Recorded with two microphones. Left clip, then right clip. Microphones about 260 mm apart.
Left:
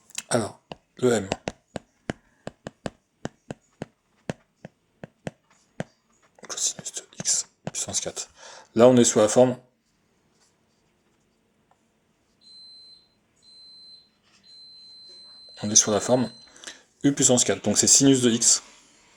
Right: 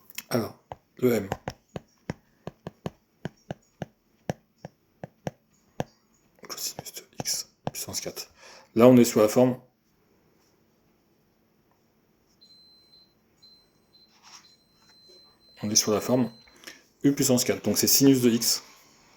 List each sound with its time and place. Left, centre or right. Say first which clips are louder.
0.1 s chopping: left 4 dB; left
2.4 s a sound: left 3 dB; centre
6.3 s whispering: left 6 dB; left
7.3 s writing: left 5 dB; left
15.5 s speech: left 3 dB; left